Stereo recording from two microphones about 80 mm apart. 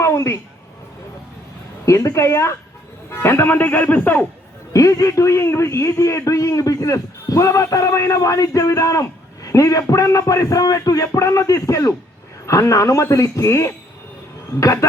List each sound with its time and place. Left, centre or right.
0.0 s a sound: left
1.8 s a man's voice: left
4.7 s a man's voice: left